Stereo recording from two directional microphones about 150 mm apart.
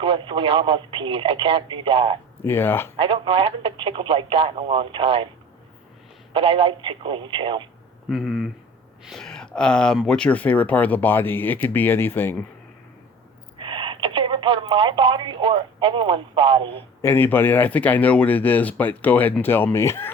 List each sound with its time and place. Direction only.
0.0 s speech: 35° right (ahead or behind)
2.4 s speech: 15° left (ahead or behind)
3.0 s speech: 35° right (ahead or behind)
6.3 s speech: 35° right (ahead or behind)
8.1 s speech: centre (ahead or behind)
13.6 s telephone: 35° right (ahead or behind)
17.0 s speech: 15° left (ahead or behind)